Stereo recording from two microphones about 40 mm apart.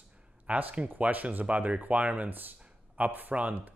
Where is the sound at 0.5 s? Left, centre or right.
Right.